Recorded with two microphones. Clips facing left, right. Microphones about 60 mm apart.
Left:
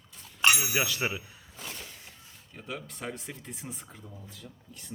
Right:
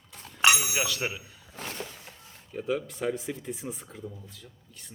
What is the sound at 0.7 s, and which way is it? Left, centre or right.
Speech, centre.